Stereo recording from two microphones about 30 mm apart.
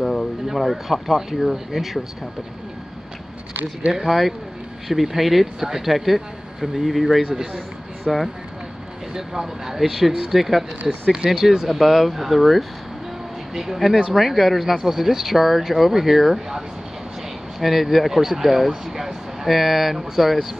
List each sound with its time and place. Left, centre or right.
0.0 s a sound: centre
0.5 s speech: centre
3.9 s speech: centre
14.8 s speech: centre